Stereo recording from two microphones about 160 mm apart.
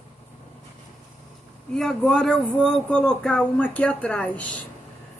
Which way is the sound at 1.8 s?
5° left (ahead or behind).